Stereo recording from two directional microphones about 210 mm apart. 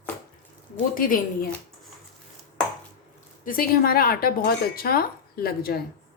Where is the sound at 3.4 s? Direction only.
45° left (ahead or behind).